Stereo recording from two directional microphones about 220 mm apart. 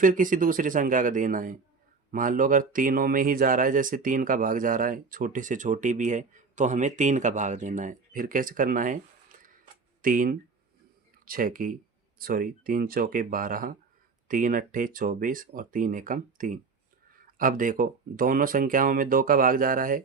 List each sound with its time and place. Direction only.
0.0 s speech: 35° right (ahead or behind)
9.3 s a sound: 40° right (ahead or behind)
10.0 s speech: 40° right (ahead or behind)